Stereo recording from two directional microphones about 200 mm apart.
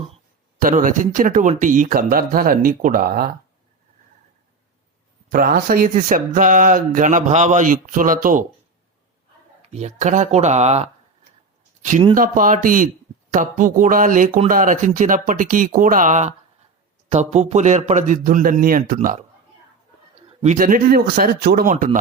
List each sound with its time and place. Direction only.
0.6 s speech: 40° right (ahead or behind)
5.3 s speech: 45° right (ahead or behind)
9.7 s speech: 35° right (ahead or behind)
20.2 s speech: 35° right (ahead or behind)